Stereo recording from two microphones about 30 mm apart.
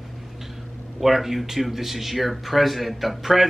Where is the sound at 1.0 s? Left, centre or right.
Centre.